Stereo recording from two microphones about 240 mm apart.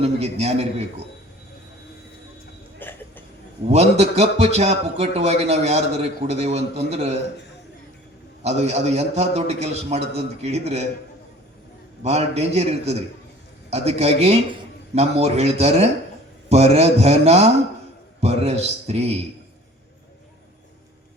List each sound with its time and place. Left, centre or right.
0.0 s a man's voice: right
2.7 s a sound: centre
3.7 s a man's voice: right
8.4 s a man's voice: right
12.0 s a man's voice: right